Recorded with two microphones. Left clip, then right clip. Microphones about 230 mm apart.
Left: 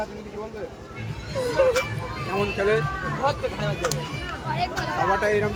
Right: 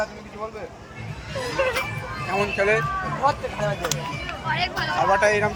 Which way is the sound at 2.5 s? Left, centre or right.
Centre.